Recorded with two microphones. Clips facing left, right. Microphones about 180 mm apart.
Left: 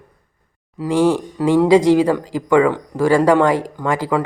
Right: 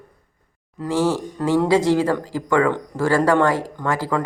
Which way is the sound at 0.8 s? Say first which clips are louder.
Left 5 dB; 15° left (ahead or behind).